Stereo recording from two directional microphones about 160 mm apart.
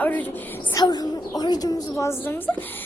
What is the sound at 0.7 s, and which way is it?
A child's voice, 25° left (ahead or behind).